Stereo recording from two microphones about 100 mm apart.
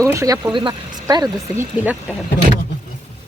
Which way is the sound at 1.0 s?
40° right (ahead or behind).